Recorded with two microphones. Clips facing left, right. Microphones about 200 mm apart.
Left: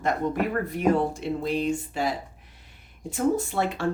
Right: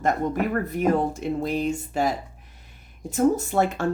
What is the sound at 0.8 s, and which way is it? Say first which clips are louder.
Speech: even; 45° right (ahead or behind).